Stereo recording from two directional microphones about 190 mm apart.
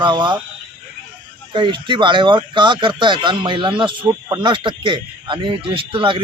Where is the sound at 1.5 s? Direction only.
25° right (ahead or behind).